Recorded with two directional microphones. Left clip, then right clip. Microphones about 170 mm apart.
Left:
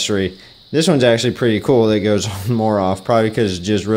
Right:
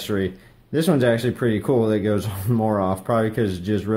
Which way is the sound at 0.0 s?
25° left (ahead or behind).